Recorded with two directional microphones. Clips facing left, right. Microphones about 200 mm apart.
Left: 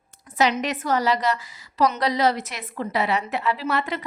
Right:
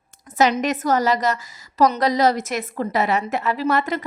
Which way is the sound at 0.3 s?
45° right (ahead or behind).